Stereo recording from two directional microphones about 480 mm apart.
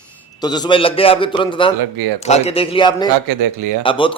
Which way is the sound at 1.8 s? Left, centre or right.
Right.